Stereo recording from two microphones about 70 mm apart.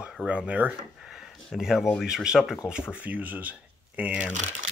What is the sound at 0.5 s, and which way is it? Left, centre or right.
Speech, right.